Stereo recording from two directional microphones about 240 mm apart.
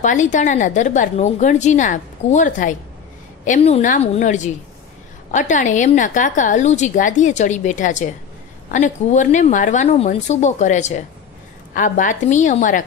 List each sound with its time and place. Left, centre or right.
0.0 s a woman's voice: left